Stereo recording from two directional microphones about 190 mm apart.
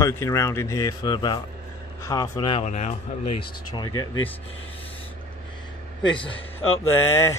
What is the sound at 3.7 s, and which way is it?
Speech, 20° left (ahead or behind).